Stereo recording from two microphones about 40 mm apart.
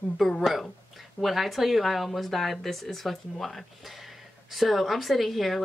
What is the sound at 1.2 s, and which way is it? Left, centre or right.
Speech, centre.